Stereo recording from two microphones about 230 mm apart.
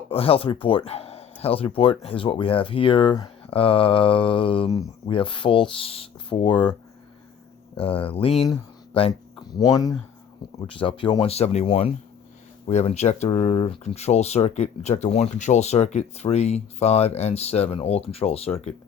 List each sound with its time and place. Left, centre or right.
0.1 s speech: left
7.8 s speech: left